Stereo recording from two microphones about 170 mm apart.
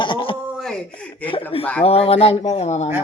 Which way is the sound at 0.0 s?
30° left (ahead or behind).